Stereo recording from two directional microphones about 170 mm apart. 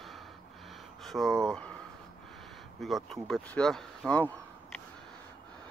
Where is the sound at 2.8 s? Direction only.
Centre (ahead or behind).